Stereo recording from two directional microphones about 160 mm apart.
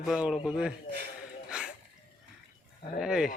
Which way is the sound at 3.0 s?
5° right (ahead or behind).